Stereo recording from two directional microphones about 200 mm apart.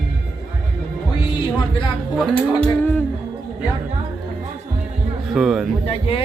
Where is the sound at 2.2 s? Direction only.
5° left (ahead or behind).